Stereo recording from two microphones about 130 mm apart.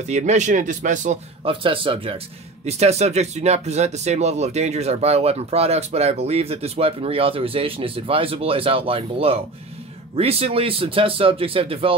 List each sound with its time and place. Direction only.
0.1 s speech: 65° right (ahead or behind)
1.4 s speech: 40° right (ahead or behind)
2.6 s speech: 55° right (ahead or behind)